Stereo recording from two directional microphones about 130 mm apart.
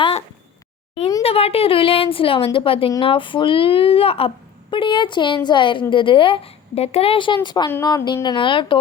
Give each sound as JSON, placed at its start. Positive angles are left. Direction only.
{"t": 1.2, "sound": "a woman's voice", "side_deg": 50}